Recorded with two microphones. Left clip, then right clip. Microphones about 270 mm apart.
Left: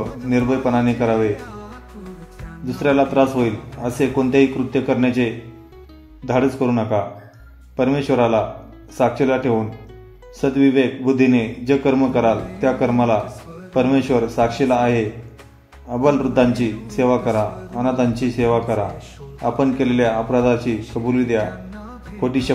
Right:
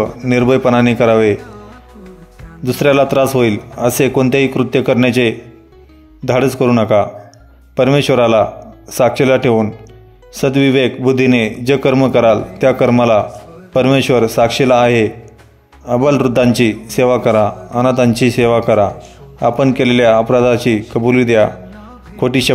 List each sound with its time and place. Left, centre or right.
0.2 s a man's voice: right
1.3 s music: centre
2.6 s a man's voice: right